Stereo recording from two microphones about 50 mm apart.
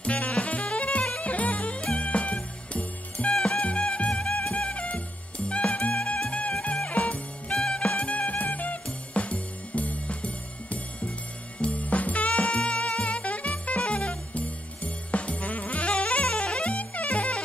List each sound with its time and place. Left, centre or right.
0.0 s music: left
3.3 s music: centre
3.6 s music: left
7.5 s music: centre
7.9 s music: left